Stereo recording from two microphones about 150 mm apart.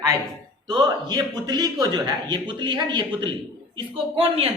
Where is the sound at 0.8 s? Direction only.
30° right (ahead or behind).